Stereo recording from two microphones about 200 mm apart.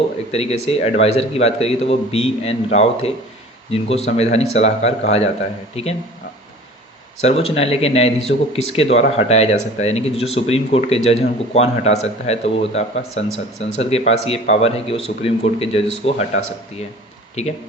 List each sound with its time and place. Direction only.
0.3 s speech: 30° left (ahead or behind)
7.2 s speech: 30° left (ahead or behind)
17.4 s speech: 35° left (ahead or behind)